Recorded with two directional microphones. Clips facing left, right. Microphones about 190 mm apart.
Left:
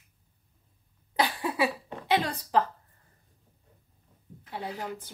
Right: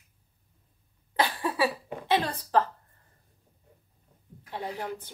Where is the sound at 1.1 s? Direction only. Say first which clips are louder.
Even; 15° left (ahead or behind).